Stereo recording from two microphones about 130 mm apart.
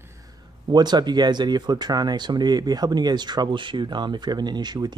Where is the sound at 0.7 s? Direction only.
35° right (ahead or behind).